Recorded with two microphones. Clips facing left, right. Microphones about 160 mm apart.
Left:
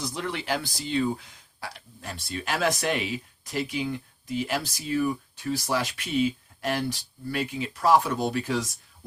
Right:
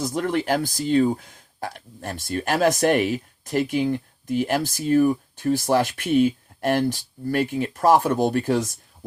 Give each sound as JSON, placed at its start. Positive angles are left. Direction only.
{"t": 0.0, "sound": "speech", "side_deg": -45}